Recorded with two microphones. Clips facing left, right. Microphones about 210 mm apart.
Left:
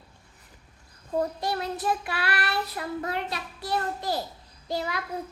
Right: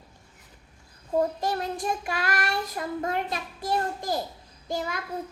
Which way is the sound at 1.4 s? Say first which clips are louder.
Right 1 dB; 45° right (ahead or behind).